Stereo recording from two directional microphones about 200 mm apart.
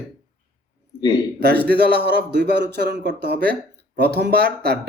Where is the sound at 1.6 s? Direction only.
55° right (ahead or behind).